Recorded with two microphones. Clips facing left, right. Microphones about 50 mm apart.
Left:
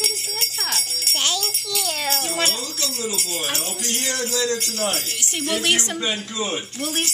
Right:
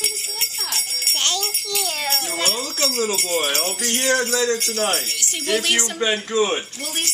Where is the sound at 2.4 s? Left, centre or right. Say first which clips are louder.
Right 3 dB; right.